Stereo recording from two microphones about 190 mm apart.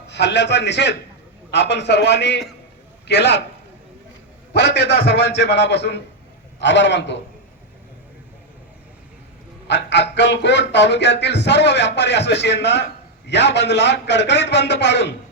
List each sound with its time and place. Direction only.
0.1 s a man's voice: 65° left (ahead or behind)
4.5 s a man's voice: 65° left (ahead or behind)
9.6 s a man's voice: 65° left (ahead or behind)